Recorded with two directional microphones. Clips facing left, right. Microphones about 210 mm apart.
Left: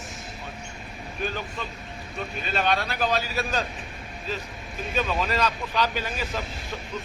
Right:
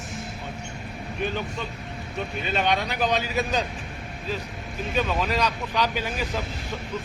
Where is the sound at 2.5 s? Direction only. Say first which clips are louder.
Even; 20° right (ahead or behind).